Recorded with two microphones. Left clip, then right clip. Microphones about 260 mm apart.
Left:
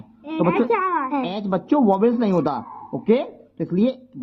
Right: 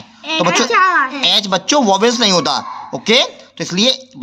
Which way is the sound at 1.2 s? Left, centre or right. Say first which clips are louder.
Right 11 dB; centre.